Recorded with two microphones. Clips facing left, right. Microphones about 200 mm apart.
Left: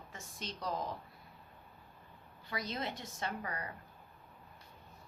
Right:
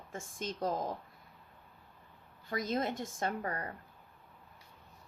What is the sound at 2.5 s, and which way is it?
Speech, 50° right (ahead or behind).